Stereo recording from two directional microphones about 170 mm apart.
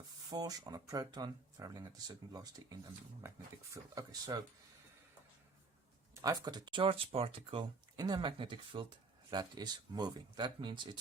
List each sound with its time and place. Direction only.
0.3 s speech: 25° right (ahead or behind)
3.9 s speech: 20° right (ahead or behind)
6.2 s speech: 25° right (ahead or behind)